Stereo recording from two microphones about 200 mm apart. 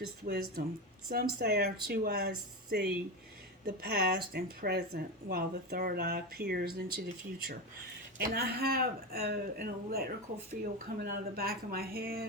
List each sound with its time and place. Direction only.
0.0 s speech: 50° right (ahead or behind)
8.2 s speech: 50° right (ahead or behind)